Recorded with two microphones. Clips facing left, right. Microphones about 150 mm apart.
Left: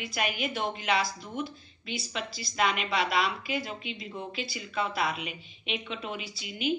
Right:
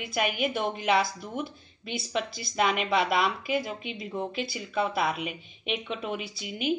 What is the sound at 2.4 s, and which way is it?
A woman's voice, 55° right (ahead or behind).